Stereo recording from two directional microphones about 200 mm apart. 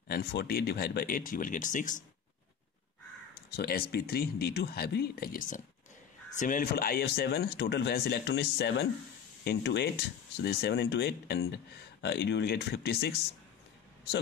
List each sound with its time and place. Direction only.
0.1 s speech: 55° left (ahead or behind)
3.5 s speech: 50° left (ahead or behind)